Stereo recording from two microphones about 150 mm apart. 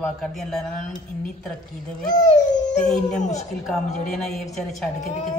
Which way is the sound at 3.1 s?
50° left (ahead or behind).